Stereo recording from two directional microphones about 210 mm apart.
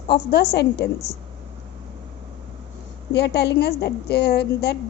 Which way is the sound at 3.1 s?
55° left (ahead or behind).